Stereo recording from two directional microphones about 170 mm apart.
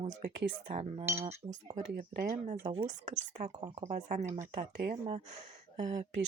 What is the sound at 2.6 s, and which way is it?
Speech, 25° right (ahead or behind).